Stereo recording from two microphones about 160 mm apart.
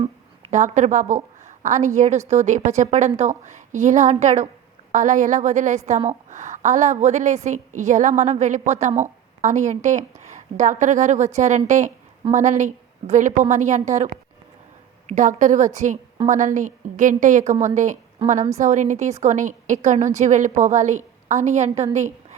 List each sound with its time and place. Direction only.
0.5 s a woman's voice: 50° right (ahead or behind)